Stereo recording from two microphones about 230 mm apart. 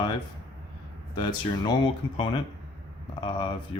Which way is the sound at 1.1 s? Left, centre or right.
Centre.